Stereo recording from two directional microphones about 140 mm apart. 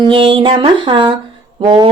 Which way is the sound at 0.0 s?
40° right (ahead or behind).